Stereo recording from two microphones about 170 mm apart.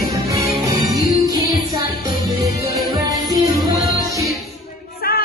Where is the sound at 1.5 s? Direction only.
20° right (ahead or behind).